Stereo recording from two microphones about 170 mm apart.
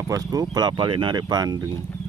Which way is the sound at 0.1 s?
20° right (ahead or behind).